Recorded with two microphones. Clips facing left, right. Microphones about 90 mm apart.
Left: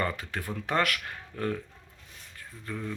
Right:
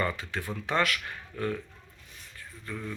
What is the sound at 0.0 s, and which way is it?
Speech, 45° left (ahead or behind).